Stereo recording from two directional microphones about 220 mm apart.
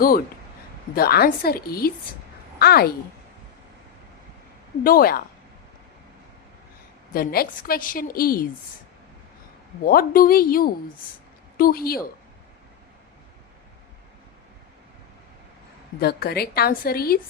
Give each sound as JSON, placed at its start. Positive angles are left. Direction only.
{"t": 0.9, "sound": "a woman's voice", "side_deg": 45}
{"t": 4.8, "sound": "a woman's voice", "side_deg": 40}
{"t": 7.1, "sound": "a woman's voice", "side_deg": 40}
{"t": 9.8, "sound": "a woman's voice", "side_deg": 40}
{"t": 16.0, "sound": "a woman's voice", "side_deg": 45}